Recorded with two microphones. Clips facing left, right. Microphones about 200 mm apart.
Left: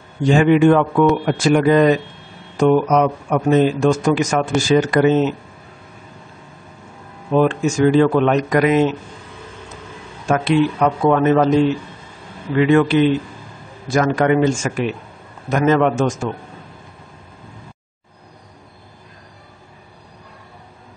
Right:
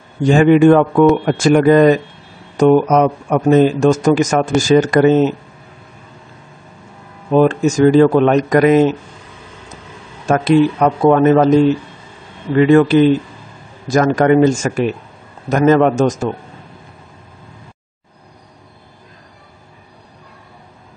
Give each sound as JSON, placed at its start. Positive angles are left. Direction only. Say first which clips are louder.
{"t": 0.3, "sound": "speech", "louder": "right 4 dB", "side_deg": -45}
{"t": 7.3, "sound": "speech", "louder": "right 4 dB", "side_deg": -40}
{"t": 10.2, "sound": "speech", "louder": "right 4 dB", "side_deg": -40}
{"t": 12.5, "sound": "speech", "louder": "right 4 dB", "side_deg": -40}